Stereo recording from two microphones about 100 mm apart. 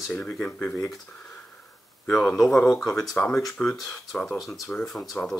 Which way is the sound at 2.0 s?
5° left (ahead or behind).